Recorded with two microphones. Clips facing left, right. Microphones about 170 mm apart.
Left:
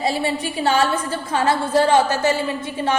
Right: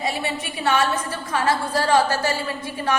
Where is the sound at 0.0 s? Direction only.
30° left (ahead or behind).